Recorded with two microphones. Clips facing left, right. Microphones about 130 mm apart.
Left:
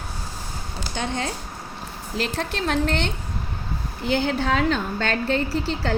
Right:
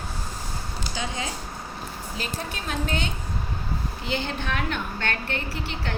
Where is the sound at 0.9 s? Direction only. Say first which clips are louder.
Left 5 dB; 60° left (ahead or behind).